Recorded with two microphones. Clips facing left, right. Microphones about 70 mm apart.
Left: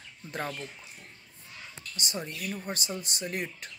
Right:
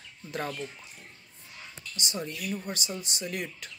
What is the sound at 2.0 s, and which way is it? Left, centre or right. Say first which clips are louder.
Speech: right 1 dB; left.